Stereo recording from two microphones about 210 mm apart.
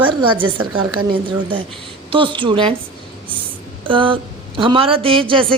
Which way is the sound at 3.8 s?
25° right (ahead or behind).